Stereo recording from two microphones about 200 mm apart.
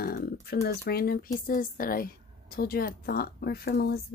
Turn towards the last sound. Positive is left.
turn(degrees=50)  # may be behind; listen again after turning